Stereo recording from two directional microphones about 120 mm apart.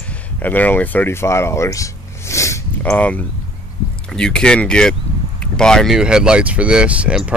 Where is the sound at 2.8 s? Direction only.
10° left (ahead or behind).